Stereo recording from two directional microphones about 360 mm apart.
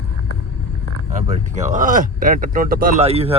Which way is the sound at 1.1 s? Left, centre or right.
Centre.